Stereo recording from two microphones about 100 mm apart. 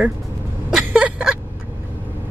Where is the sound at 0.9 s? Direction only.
10° right (ahead or behind).